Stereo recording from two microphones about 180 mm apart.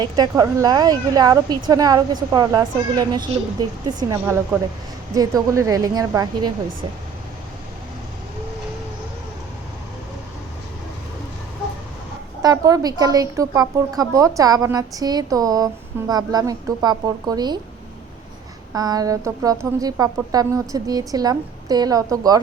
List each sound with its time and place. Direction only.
0.0 s a woman's voice: 20° right (ahead or behind)
12.4 s a woman's voice: 20° right (ahead or behind)
18.7 s a woman's voice: 20° right (ahead or behind)